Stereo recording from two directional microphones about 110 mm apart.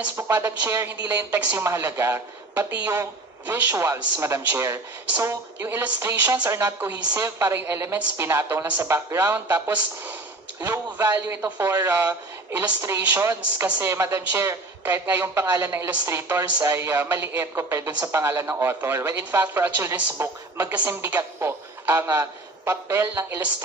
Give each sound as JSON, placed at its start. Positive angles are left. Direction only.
{"t": 0.1, "sound": "a woman's voice", "side_deg": -20}